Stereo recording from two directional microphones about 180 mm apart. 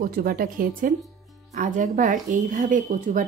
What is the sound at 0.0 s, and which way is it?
Speech, 50° right (ahead or behind).